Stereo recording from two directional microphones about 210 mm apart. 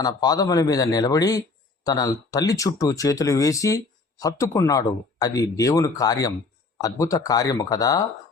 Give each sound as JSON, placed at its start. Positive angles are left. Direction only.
{"t": 0.0, "sound": "a man's voice", "side_deg": 20}